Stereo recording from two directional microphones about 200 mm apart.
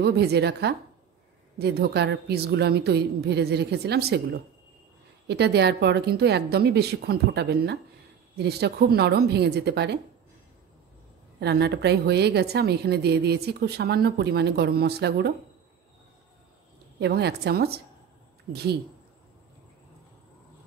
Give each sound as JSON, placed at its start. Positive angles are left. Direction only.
{"t": 0.0, "sound": "a woman's voice", "side_deg": -55}
{"t": 11.3, "sound": "a woman's voice", "side_deg": -55}
{"t": 17.0, "sound": "a woman's voice", "side_deg": -55}